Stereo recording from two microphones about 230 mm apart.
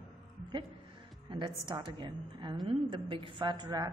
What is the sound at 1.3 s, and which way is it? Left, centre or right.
A woman's voice, right.